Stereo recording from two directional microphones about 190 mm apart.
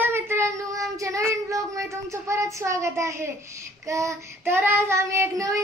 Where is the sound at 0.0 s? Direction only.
15° right (ahead or behind).